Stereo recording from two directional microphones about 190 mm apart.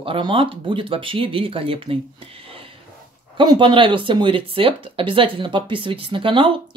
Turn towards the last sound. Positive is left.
turn(degrees=-25)  # may be behind; listen again after turning